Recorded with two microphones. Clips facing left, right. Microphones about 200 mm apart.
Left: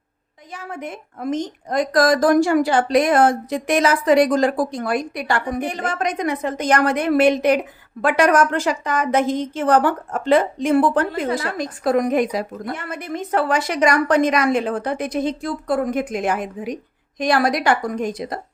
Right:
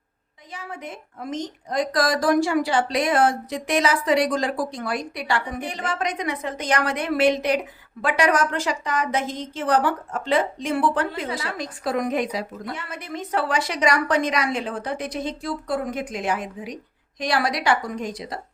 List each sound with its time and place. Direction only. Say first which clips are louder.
0.5 s a woman's voice: left 4 dB; 55° left (ahead or behind)